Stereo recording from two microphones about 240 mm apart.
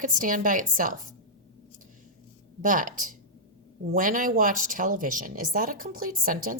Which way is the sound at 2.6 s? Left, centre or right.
Right.